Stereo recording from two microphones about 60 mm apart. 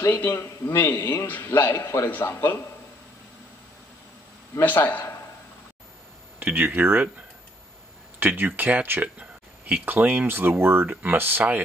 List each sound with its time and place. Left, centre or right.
0.0 s a man's voice: left
4.6 s a man's voice: left
6.4 s speech: right
8.2 s speech: right